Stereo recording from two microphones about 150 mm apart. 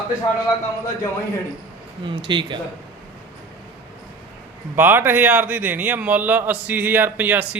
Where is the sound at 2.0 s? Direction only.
30° right (ahead or behind).